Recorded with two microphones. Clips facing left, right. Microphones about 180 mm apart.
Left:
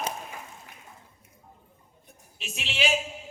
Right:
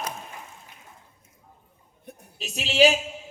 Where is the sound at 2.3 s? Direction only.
40° right (ahead or behind).